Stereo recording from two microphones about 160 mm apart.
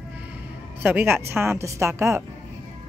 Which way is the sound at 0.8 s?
10° right (ahead or behind).